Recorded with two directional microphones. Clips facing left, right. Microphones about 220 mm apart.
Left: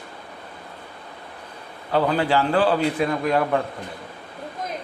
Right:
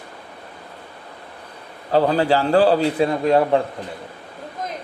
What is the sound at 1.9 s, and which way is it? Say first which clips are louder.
Speech: right 3 dB; 35° right (ahead or behind).